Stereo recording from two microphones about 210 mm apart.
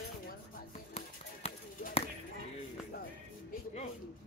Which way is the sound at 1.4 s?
30° left (ahead or behind).